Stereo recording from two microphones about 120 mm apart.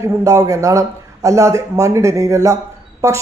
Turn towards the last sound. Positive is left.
turn(degrees=-25)  # may be behind; listen again after turning